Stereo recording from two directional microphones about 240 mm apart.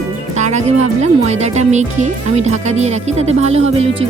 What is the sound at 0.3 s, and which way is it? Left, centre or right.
Speech, right.